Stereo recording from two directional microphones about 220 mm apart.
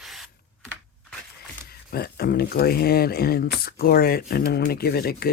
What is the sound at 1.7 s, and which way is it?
Speech, 45° left (ahead or behind).